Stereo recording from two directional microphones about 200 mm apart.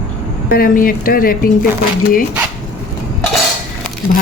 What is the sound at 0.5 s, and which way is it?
Speech, 45° left (ahead or behind).